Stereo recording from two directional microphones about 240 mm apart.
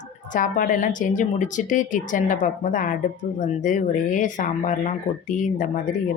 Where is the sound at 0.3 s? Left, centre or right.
Left.